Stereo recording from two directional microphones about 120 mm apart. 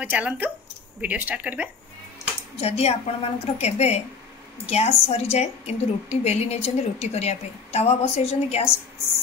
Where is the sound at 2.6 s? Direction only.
60° left (ahead or behind).